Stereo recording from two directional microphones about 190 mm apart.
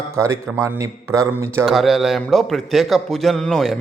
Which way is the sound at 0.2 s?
15° right (ahead or behind).